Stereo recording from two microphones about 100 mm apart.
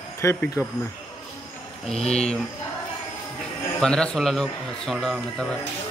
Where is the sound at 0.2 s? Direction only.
30° left (ahead or behind).